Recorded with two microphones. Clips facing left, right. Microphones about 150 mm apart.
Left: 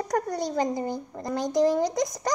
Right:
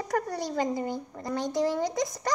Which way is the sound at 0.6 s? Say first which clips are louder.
Even; 25° left (ahead or behind).